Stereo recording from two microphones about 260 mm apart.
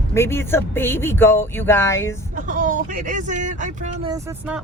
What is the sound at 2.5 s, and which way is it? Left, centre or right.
Speech, right.